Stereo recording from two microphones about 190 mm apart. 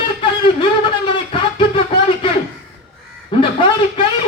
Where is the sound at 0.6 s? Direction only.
25° left (ahead or behind).